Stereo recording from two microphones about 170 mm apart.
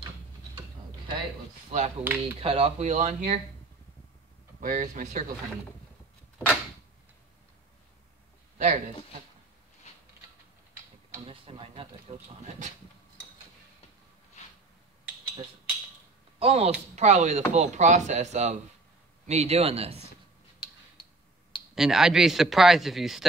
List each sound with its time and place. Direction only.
1.7 s speech: 45° right (ahead or behind)
2.0 s speech: 10° right (ahead or behind)
2.4 s speech: 35° right (ahead or behind)
4.6 s speech: 50° right (ahead or behind)
8.5 s speech: 45° right (ahead or behind)
11.1 s a sound: 30° right (ahead or behind)
16.3 s speech: 35° right (ahead or behind)
21.7 s a man's voice: 5° right (ahead or behind)